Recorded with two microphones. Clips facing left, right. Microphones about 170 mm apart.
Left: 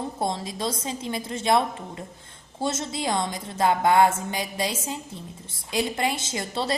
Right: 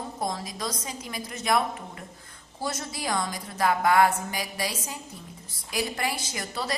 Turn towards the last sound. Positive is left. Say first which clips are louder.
# left 4 dB
turn(degrees=25)  # may be behind; listen again after turning